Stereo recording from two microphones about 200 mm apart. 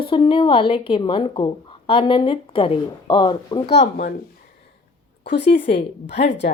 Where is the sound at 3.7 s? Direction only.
55° left (ahead or behind).